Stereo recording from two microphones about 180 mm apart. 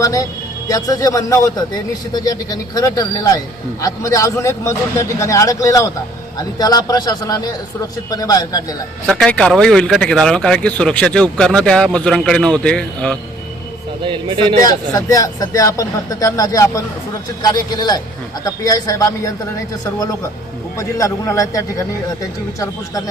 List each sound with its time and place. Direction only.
0.0 s speech: 20° left (ahead or behind)
9.0 s speech: 5° left (ahead or behind)
14.0 s speech: 30° right (ahead or behind)
14.6 s speech: 20° left (ahead or behind)
20.7 s a man's voice: 15° left (ahead or behind)